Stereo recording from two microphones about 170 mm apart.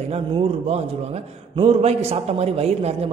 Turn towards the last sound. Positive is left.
turn(degrees=-40)  # may be behind; listen again after turning